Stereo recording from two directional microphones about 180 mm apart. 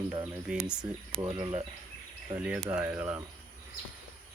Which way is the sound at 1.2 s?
30° right (ahead or behind).